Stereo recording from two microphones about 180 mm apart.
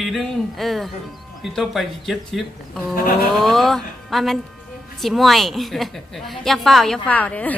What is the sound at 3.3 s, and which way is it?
A woman's voice, centre (ahead or behind).